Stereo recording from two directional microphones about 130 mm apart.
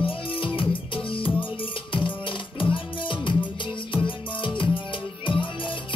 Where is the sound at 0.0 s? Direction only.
40° left (ahead or behind).